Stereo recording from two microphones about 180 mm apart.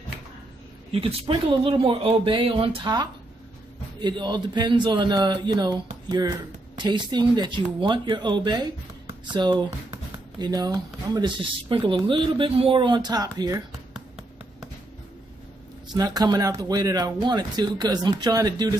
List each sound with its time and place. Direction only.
0.9 s speech: 30° right (ahead or behind)
15.9 s speech: 20° right (ahead or behind)